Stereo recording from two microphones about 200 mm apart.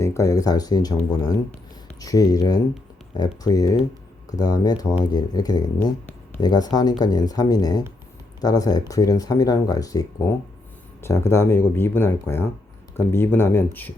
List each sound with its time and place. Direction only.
0.0 s speech: 15° left (ahead or behind)